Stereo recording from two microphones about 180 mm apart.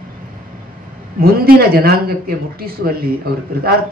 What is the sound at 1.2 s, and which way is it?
A man's voice, 55° right (ahead or behind).